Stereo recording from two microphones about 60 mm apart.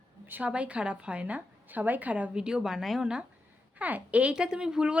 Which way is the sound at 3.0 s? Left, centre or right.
Centre.